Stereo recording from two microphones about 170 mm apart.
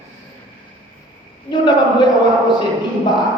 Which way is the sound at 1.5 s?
25° left (ahead or behind).